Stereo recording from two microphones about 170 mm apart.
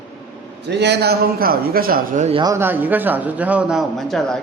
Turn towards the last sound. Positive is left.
turn(degrees=0)  # may be behind; listen again after turning